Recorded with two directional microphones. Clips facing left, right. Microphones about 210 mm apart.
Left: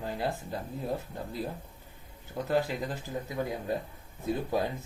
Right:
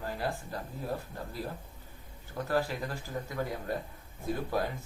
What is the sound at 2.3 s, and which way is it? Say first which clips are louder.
Speech: left 2 dB; 20° left (ahead or behind).